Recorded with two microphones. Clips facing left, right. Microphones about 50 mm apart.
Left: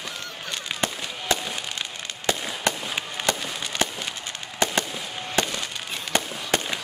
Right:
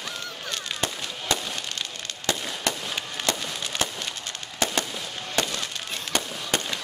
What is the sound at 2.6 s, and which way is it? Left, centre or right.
Fireworks, centre.